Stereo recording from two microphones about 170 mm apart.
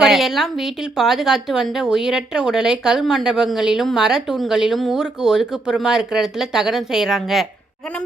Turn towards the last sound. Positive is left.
turn(degrees=0)  # may be behind; listen again after turning